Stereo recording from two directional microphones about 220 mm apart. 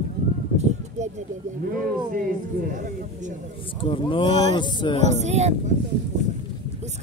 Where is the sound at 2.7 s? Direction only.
35° right (ahead or behind).